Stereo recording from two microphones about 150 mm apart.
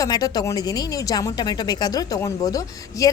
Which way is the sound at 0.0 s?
25° left (ahead or behind).